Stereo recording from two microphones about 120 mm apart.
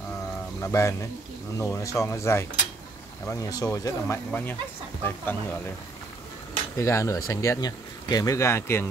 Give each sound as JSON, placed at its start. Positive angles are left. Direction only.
{"t": 0.6, "sound": "speech", "side_deg": 25}
{"t": 4.3, "sound": "speech", "side_deg": 15}
{"t": 6.8, "sound": "speech", "side_deg": 25}